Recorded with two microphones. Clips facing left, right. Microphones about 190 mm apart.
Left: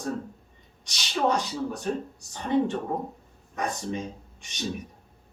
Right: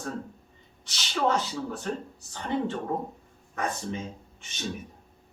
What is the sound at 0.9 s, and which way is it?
Speech, 15° left (ahead or behind).